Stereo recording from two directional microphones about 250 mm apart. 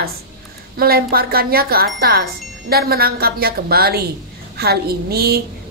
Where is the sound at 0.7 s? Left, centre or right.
Right.